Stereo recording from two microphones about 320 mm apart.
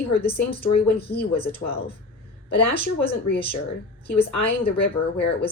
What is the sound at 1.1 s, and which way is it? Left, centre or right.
Speech, left.